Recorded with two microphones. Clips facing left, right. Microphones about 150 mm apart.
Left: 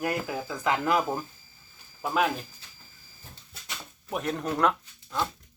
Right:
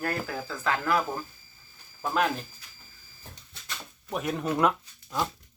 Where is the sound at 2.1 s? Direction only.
5° left (ahead or behind).